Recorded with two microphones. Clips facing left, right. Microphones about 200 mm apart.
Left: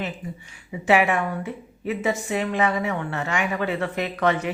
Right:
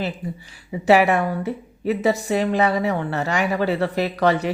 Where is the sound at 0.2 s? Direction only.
35° right (ahead or behind).